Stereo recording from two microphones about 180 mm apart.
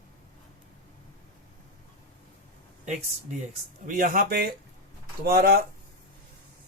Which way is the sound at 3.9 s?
50° right (ahead or behind).